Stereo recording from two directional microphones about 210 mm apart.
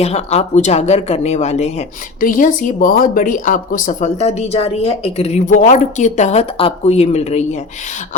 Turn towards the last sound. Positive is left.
turn(degrees=30)  # may be behind; listen again after turning